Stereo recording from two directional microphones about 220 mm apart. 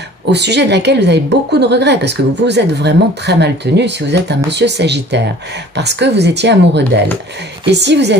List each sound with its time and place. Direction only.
0.3 s a woman's voice: 50° right (ahead or behind)